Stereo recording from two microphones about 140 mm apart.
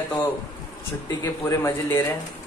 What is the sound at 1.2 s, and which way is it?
Speech, 20° left (ahead or behind).